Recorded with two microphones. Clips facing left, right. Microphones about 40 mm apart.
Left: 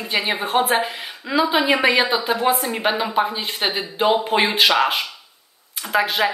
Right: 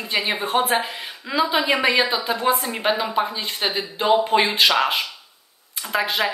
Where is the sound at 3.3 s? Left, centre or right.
Centre.